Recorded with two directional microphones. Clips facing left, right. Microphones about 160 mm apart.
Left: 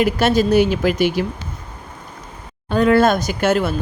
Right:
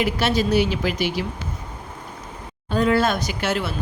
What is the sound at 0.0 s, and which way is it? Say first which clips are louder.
Speech: left 5 dB; 45° left (ahead or behind).